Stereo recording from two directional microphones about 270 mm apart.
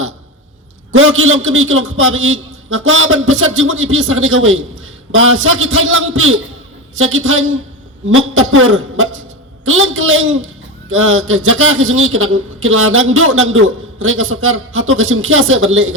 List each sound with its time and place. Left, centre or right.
0.9 s a man's voice: right